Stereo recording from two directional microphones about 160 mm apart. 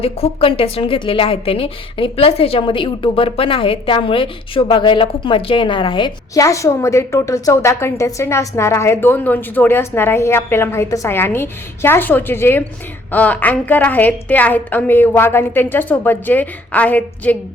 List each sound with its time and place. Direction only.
0.0 s a woman's voice: 35° left (ahead or behind)
6.3 s a woman's voice: 20° left (ahead or behind)